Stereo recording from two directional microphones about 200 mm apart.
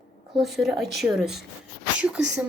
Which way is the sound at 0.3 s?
Centre (ahead or behind).